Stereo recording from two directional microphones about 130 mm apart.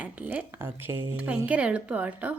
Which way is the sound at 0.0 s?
15° right (ahead or behind).